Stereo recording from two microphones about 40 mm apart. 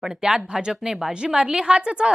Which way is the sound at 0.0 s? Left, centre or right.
Centre.